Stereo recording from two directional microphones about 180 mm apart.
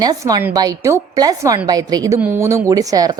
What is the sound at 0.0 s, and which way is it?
A woman's voice, 20° right (ahead or behind).